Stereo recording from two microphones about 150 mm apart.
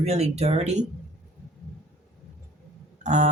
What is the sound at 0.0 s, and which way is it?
Speech, 45° right (ahead or behind).